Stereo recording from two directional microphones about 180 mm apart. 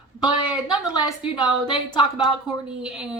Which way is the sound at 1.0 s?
25° left (ahead or behind).